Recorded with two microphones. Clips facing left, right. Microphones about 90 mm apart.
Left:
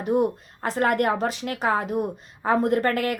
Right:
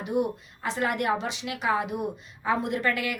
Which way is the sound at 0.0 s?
45° left (ahead or behind).